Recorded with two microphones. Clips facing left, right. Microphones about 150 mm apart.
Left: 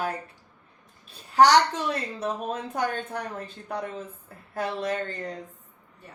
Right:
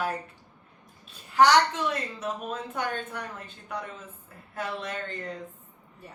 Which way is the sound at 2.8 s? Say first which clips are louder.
Left 4 dB; 35° left (ahead or behind).